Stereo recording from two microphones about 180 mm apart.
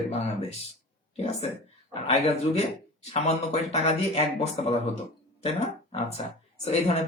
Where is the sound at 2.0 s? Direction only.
35° left (ahead or behind).